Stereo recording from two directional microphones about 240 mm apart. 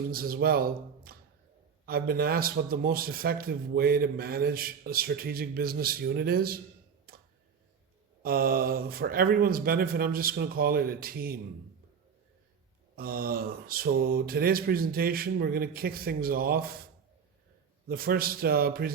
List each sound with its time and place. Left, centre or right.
0.1 s speech: right
7.1 s a sound: right
8.2 s speech: right
13.0 s speech: right
17.8 s speech: right